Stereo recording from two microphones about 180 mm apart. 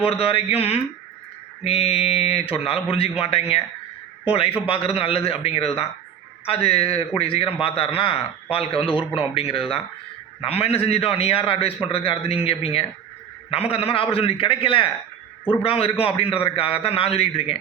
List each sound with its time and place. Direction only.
0.0 s a man's voice: 30° left (ahead or behind)